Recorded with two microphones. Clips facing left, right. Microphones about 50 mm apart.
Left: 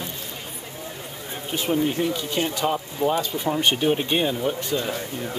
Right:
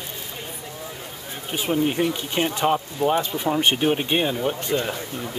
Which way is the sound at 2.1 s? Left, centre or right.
Right.